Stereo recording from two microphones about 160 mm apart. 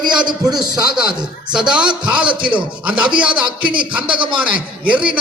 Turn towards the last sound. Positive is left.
turn(degrees=-10)  # may be behind; listen again after turning